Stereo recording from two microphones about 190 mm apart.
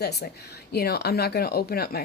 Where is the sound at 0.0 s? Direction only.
60° left (ahead or behind).